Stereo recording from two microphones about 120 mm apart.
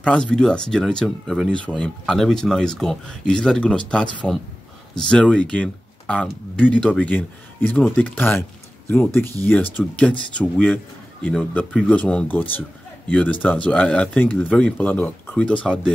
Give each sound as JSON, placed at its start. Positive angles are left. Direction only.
{"t": 0.0, "sound": "speech", "side_deg": 10}